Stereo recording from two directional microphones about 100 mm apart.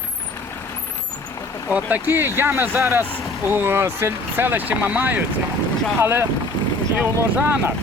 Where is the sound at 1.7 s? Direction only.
20° right (ahead or behind).